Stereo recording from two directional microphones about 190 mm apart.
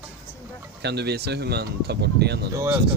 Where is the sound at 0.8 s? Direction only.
60° right (ahead or behind).